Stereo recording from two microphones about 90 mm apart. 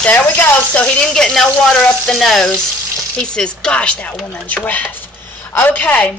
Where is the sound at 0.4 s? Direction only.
15° left (ahead or behind).